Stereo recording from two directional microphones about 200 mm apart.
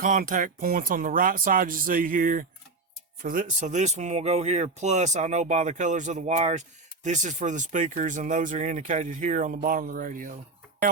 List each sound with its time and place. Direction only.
0.0 s speech: 40° right (ahead or behind)